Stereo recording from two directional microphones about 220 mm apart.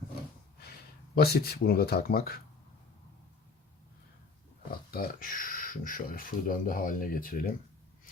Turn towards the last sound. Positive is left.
turn(degrees=40)  # may be behind; listen again after turning